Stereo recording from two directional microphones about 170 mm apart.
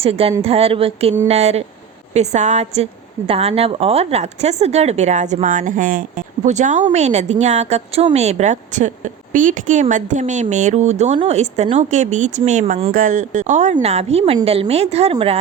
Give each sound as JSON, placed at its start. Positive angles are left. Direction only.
{"t": 0.0, "sound": "a woman's voice", "side_deg": -35}